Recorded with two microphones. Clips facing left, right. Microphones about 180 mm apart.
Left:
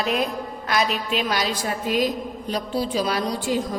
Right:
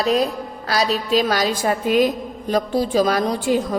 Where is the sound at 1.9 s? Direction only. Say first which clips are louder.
Right 4 dB; 50° right (ahead or behind).